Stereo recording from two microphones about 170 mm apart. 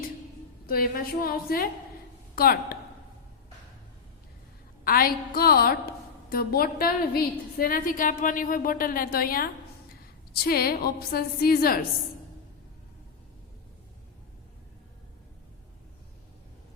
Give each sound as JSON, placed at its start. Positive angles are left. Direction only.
{"t": 0.7, "sound": "a woman's voice", "side_deg": 60}
{"t": 4.8, "sound": "a woman's voice", "side_deg": 60}